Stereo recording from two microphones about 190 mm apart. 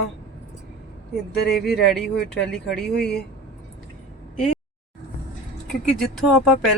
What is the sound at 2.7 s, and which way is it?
Speech, 60° left (ahead or behind).